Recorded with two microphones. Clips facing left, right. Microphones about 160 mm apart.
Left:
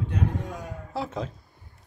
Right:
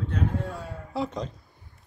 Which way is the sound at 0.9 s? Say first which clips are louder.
Right 1 dB; centre (ahead or behind).